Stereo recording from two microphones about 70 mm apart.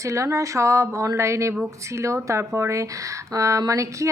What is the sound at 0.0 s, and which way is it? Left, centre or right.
A woman's voice, right.